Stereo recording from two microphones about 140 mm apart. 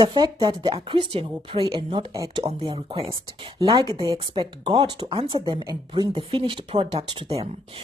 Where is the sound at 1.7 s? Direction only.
25° right (ahead or behind).